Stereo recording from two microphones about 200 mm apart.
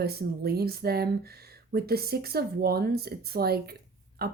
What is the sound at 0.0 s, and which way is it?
Speech, 50° right (ahead or behind).